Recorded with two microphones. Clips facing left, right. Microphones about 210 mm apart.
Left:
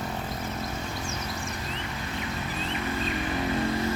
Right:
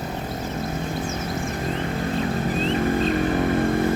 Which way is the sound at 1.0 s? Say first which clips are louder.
Right 7 dB; 50° right (ahead or behind).